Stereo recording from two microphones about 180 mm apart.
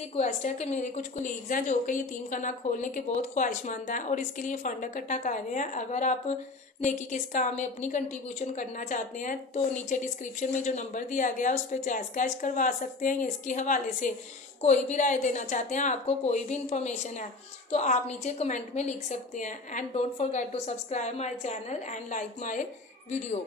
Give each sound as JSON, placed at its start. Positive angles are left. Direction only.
{"t": 0.2, "sound": "a woman's voice", "side_deg": 40}